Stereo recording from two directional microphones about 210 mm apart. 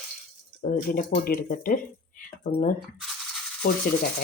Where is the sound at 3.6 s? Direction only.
40° left (ahead or behind).